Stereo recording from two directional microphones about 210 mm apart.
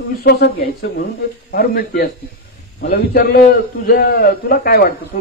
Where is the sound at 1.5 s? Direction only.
45° left (ahead or behind).